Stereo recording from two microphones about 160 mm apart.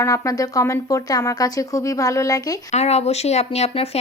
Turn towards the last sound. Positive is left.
turn(degrees=40)  # may be behind; listen again after turning